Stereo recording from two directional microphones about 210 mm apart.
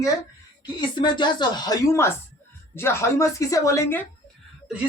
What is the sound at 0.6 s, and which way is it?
A woman's voice, 20° left (ahead or behind).